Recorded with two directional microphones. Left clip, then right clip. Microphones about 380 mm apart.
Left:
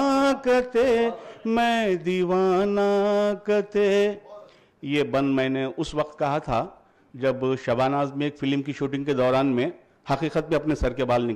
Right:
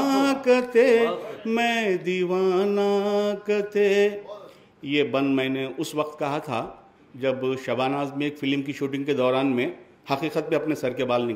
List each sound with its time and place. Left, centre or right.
0.0 s a man's voice: left